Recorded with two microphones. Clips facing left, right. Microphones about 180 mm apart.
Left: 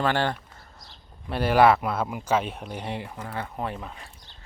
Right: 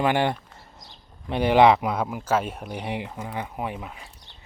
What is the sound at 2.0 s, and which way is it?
Speech, centre (ahead or behind).